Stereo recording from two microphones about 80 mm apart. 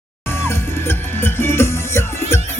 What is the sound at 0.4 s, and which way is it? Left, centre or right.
Music, left.